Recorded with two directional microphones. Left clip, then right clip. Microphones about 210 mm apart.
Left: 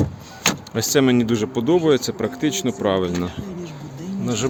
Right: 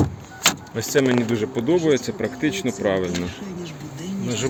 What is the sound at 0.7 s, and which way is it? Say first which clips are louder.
Speech: left 6 dB; 15° left (ahead or behind).